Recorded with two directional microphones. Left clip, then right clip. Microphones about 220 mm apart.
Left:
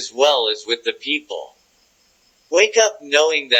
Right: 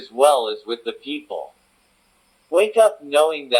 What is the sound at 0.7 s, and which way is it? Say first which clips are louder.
Speech: left 7 dB; 20° left (ahead or behind).